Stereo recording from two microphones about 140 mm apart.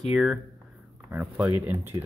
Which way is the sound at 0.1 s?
Centre (ahead or behind).